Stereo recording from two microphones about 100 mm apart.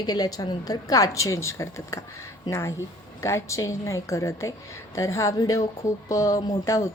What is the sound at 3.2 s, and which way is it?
Speech, 30° left (ahead or behind).